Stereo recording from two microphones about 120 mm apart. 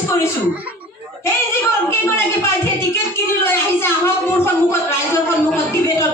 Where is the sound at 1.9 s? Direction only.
20° left (ahead or behind).